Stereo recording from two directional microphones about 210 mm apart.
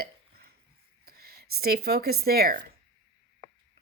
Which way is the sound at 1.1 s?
45° right (ahead or behind).